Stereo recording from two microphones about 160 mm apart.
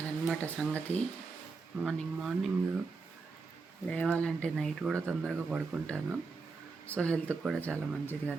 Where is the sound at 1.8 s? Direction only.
Centre (ahead or behind).